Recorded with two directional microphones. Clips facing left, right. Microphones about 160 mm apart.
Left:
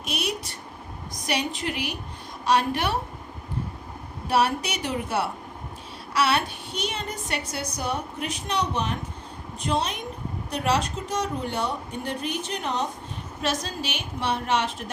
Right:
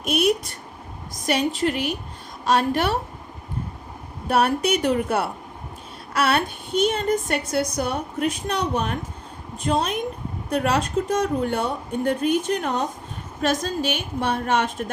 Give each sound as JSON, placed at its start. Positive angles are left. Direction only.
{"t": 0.0, "sound": "a woman's voice", "side_deg": -55}
{"t": 4.3, "sound": "a woman's voice", "side_deg": -55}